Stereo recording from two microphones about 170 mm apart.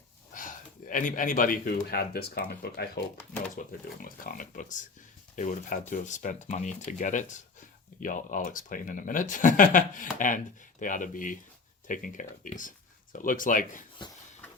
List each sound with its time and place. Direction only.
0.3 s speech: 50° left (ahead or behind); by 3.0 s 70° left (ahead or behind)
3.5 s speech: 55° left (ahead or behind)